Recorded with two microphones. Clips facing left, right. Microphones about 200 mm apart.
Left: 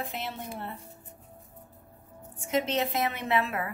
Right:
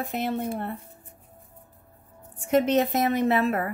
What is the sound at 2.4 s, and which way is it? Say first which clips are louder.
A woman's voice: right 7 dB; 55° right (ahead or behind).